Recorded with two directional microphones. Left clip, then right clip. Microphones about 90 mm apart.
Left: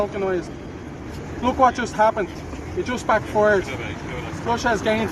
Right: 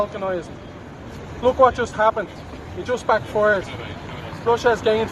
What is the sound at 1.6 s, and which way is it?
Speech, 60° right (ahead or behind).